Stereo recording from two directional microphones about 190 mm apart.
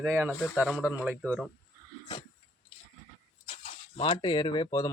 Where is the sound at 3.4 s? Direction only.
35° left (ahead or behind).